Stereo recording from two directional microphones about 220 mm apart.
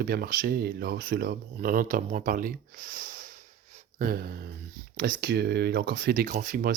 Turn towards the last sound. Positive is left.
turn(degrees=-40)  # may be behind; listen again after turning